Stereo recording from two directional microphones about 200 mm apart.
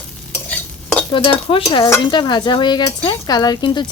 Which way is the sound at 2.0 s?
25° left (ahead or behind).